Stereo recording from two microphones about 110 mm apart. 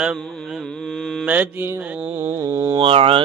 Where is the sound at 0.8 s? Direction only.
5° left (ahead or behind).